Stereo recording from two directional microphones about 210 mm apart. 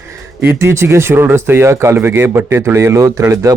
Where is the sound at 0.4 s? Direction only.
10° right (ahead or behind).